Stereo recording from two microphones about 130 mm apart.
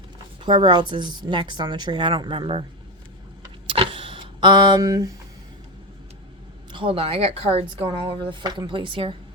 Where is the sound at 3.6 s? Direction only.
45° right (ahead or behind); by 5.2 s 30° right (ahead or behind).